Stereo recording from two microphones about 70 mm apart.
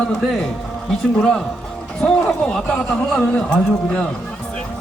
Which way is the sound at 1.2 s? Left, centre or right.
Centre.